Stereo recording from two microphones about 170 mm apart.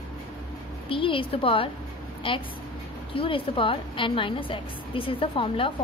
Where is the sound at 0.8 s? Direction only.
30° left (ahead or behind).